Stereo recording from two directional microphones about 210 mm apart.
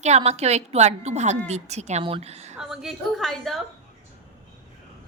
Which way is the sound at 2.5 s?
Centre (ahead or behind).